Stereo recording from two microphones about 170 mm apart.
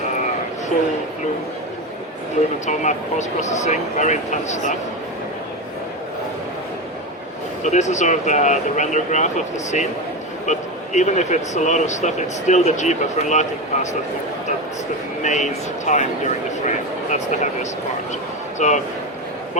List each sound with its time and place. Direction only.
2.6 s speech: 45° left (ahead or behind)
7.6 s speech: 45° left (ahead or behind)
15.2 s speech: 45° left (ahead or behind)